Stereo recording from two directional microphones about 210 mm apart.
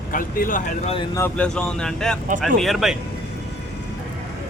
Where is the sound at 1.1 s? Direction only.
10° left (ahead or behind).